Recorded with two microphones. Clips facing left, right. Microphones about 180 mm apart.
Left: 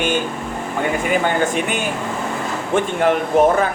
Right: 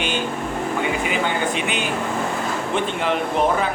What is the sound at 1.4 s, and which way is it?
A man's voice, 45° left (ahead or behind).